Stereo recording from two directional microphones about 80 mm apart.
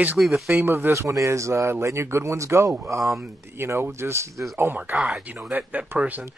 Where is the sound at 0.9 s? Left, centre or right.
Right.